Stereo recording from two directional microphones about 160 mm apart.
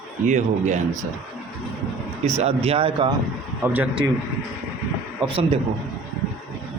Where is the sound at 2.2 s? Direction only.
45° right (ahead or behind).